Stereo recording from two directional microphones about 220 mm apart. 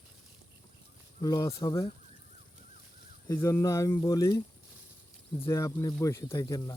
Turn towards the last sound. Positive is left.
turn(degrees=15)  # may be behind; listen again after turning